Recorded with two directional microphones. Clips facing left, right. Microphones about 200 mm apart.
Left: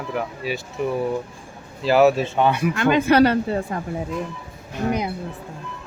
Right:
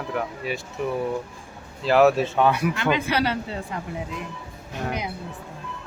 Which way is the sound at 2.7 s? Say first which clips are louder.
Left 7 dB; 50° left (ahead or behind).